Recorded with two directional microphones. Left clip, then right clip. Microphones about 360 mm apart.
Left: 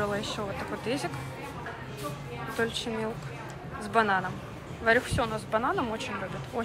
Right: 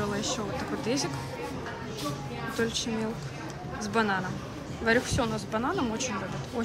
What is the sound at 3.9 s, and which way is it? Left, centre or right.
Speech, centre.